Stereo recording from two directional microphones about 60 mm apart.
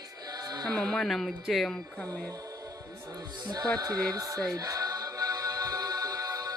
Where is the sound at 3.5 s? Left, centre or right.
Right.